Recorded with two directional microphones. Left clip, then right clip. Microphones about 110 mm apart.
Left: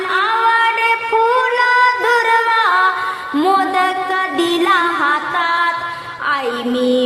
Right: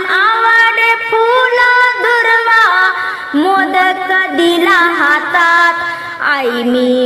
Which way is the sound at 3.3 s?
25° right (ahead or behind).